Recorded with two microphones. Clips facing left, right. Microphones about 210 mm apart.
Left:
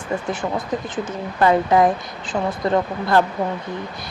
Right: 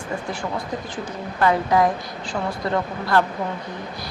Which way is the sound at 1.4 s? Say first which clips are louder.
Left 3 dB; 25° left (ahead or behind).